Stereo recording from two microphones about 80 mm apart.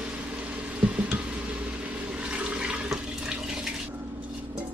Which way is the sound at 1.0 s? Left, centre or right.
Centre.